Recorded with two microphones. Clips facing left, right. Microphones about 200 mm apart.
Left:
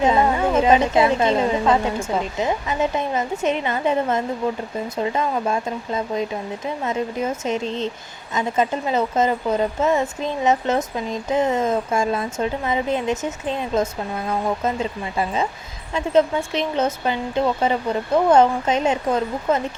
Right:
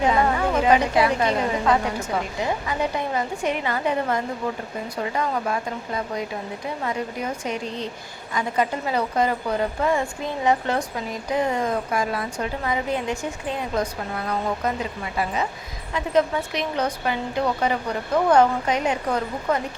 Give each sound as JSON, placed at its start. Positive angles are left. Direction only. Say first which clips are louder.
{"t": 0.0, "sound": "speech", "louder": "left 3 dB", "side_deg": 25}